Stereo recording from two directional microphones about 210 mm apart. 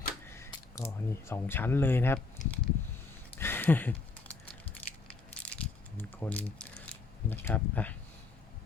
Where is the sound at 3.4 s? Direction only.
10° left (ahead or behind).